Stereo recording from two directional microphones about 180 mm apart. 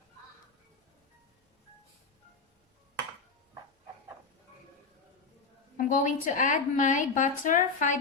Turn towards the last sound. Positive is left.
turn(degrees=45)  # may be behind; listen again after turning